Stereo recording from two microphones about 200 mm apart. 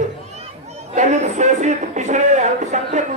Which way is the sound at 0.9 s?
35° right (ahead or behind).